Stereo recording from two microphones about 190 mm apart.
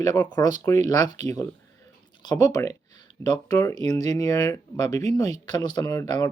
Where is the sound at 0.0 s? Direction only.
20° left (ahead or behind).